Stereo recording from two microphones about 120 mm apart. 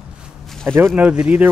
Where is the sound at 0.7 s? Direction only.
15° right (ahead or behind).